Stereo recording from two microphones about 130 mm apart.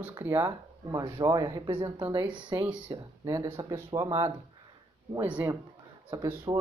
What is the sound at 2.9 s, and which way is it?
Speech, 30° right (ahead or behind).